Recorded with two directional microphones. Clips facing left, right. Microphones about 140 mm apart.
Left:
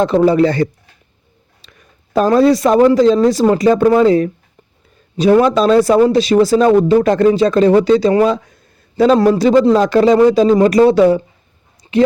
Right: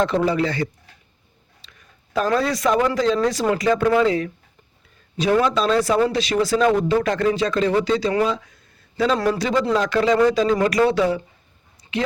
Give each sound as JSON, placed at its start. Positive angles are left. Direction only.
{"t": 0.0, "sound": "speech", "side_deg": 35}
{"t": 2.1, "sound": "speech", "side_deg": 35}